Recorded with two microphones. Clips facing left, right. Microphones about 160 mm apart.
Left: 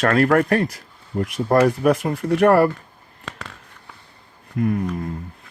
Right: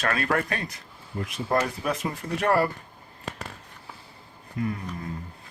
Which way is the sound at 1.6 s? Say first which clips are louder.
Left 11 dB; 65° left (ahead or behind).